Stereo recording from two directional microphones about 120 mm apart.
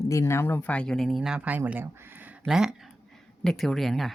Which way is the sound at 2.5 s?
5° right (ahead or behind).